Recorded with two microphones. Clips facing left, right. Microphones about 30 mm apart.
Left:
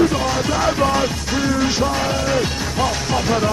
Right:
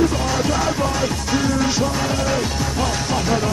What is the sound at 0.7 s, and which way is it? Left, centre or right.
Music, left.